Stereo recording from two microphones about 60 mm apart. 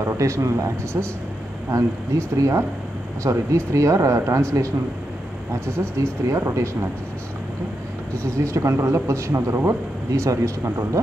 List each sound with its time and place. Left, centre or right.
0.0 s speech: right
1.0 s speech: right
1.7 s speech: right
6.3 s speech: right
8.2 s speech: right